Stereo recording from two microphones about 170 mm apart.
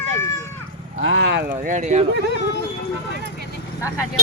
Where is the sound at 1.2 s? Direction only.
90° right.